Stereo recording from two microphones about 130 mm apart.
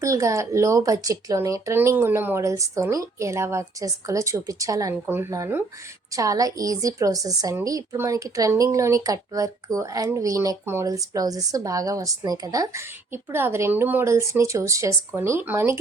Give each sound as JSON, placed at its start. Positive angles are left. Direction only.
{"t": 0.0, "sound": "speech", "side_deg": -25}